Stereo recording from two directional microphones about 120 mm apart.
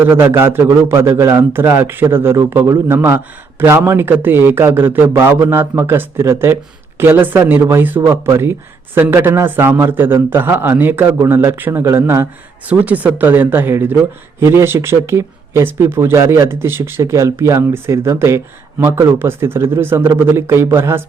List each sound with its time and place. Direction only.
0.0 s a man's voice: 20° right (ahead or behind)